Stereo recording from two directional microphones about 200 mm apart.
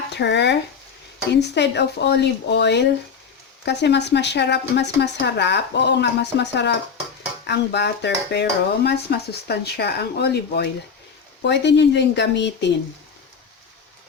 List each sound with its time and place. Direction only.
0.2 s dishes: 60° left (ahead or behind)